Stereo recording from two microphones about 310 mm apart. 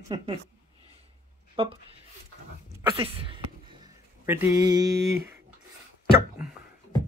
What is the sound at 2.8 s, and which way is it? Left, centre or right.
Speech, centre.